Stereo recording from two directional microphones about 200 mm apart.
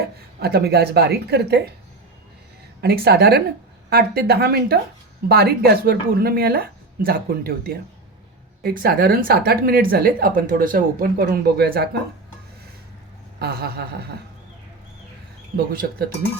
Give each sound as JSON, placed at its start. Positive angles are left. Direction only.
{"t": 0.3, "sound": "speech", "side_deg": -50}
{"t": 2.8, "sound": "speech", "side_deg": -50}
{"t": 13.4, "sound": "speech", "side_deg": -50}
{"t": 15.5, "sound": "speech", "side_deg": -45}